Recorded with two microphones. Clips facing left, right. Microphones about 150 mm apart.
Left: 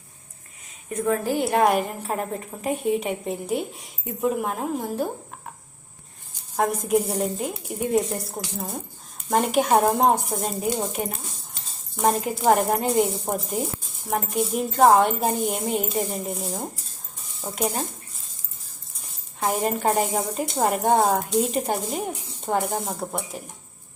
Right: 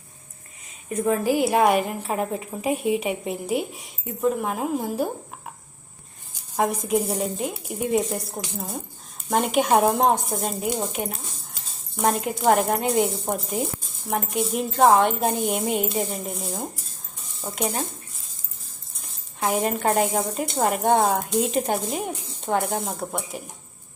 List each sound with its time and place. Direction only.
0.9 s a woman's voice: 5° right (ahead or behind)
6.6 s a woman's voice: centre (ahead or behind)
9.3 s a woman's voice: centre (ahead or behind)
19.4 s a woman's voice: centre (ahead or behind)